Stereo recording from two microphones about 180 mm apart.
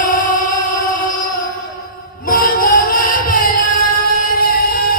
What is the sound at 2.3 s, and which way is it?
Child singing, 55° left (ahead or behind).